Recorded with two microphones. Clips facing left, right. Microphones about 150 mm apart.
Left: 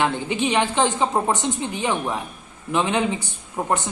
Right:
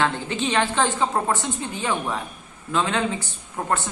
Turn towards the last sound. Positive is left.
turn(degrees=15)  # may be behind; listen again after turning